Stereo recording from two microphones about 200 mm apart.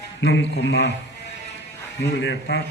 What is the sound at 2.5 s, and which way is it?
Speech, 55° left (ahead or behind).